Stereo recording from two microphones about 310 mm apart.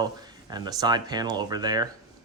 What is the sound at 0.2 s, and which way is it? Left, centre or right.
Speech, centre.